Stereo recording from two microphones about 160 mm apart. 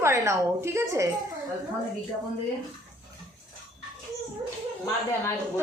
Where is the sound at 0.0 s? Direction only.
15° right (ahead or behind).